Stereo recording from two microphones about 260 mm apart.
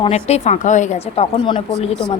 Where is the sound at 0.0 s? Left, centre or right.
Left.